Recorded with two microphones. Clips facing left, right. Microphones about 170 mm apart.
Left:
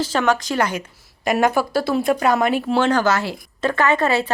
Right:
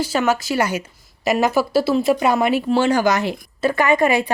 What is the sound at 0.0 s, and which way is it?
Speech, 10° right (ahead or behind).